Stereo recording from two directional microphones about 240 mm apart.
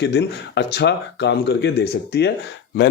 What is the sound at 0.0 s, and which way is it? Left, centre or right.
A man's voice, left.